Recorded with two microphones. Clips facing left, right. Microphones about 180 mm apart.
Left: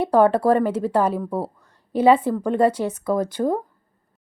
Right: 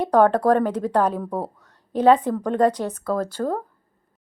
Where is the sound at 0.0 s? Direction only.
10° left (ahead or behind).